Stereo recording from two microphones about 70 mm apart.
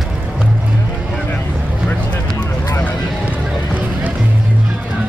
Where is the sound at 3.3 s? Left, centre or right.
Right.